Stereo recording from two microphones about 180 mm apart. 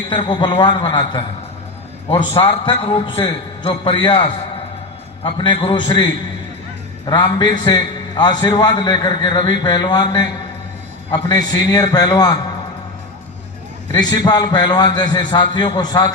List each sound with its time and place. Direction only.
0.1 s a man's voice: 30° left (ahead or behind)
2.4 s a man's voice: 30° left (ahead or behind)
13.9 s a man's voice: 20° left (ahead or behind)